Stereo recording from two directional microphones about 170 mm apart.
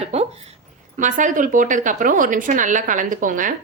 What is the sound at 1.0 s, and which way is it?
A woman's voice, 50° right (ahead or behind).